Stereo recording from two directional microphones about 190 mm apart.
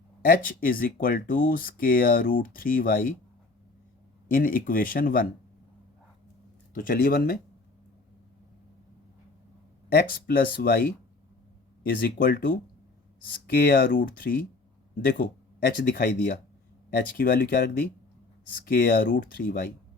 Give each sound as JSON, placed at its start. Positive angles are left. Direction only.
{"t": 0.2, "sound": "speech", "side_deg": 50}
{"t": 4.3, "sound": "speech", "side_deg": 45}
{"t": 6.7, "sound": "speech", "side_deg": 50}
{"t": 9.9, "sound": "speech", "side_deg": 50}